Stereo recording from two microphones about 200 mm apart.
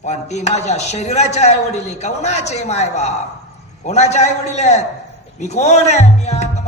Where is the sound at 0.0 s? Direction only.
35° left (ahead or behind).